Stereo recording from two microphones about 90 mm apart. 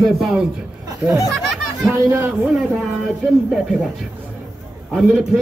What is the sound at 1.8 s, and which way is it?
Speech, 30° right (ahead or behind).